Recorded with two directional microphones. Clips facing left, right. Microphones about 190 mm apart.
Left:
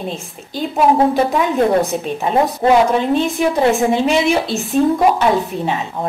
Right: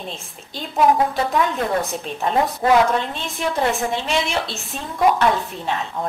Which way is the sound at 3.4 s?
5° left (ahead or behind).